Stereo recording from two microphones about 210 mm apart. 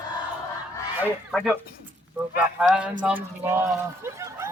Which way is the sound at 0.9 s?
Centre (ahead or behind).